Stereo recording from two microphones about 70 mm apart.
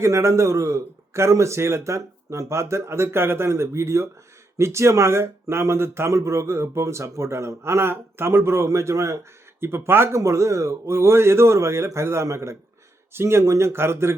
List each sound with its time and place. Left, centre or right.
0.0 s a man's voice: right
10.2 s speech: right